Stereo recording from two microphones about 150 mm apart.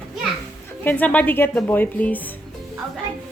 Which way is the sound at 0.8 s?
10° left (ahead or behind).